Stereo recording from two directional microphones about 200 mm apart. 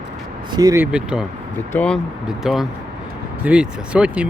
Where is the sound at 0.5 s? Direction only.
15° right (ahead or behind).